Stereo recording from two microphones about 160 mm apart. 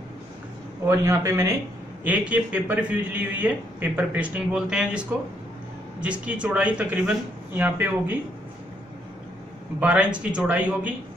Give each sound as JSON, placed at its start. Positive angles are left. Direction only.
{"t": 0.8, "sound": "a man's voice", "side_deg": -20}
{"t": 9.8, "sound": "a man's voice", "side_deg": -5}